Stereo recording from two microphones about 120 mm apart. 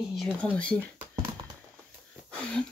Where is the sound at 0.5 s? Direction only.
10° left (ahead or behind).